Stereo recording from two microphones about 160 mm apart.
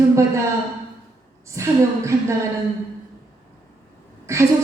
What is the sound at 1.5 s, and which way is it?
Speech, 20° right (ahead or behind).